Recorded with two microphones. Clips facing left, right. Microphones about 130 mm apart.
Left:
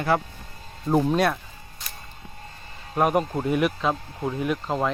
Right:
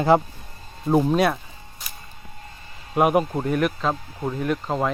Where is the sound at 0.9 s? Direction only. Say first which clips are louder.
Right 2 dB; 5° right (ahead or behind).